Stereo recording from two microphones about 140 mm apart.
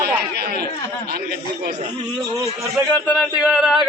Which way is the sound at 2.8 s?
10° left (ahead or behind).